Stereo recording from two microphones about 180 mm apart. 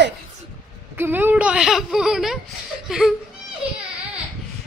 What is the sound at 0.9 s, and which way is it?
A woman's voice, 10° right (ahead or behind).